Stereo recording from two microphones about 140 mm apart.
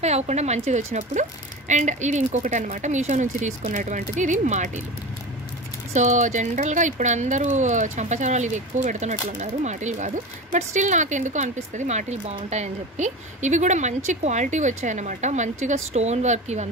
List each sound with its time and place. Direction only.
0.0 s a woman's voice: 50° right (ahead or behind)
5.9 s speech: 60° right (ahead or behind)